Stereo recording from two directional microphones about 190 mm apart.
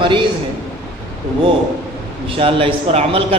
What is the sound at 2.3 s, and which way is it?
Speech, 30° right (ahead or behind).